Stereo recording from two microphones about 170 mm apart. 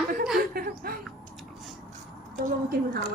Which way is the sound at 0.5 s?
60° right (ahead or behind).